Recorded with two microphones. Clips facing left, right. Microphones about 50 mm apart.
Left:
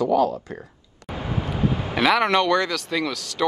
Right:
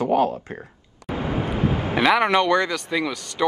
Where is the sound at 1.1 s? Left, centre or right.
Right.